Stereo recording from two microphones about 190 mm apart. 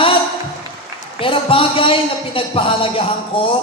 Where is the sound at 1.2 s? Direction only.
30° left (ahead or behind).